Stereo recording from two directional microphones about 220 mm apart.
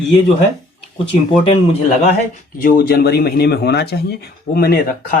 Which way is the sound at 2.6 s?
40° left (ahead or behind).